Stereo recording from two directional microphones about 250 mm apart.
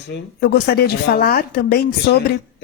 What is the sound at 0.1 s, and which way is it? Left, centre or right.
Speech, left.